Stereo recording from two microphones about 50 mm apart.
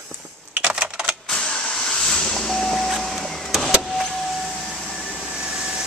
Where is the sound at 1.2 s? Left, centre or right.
Centre.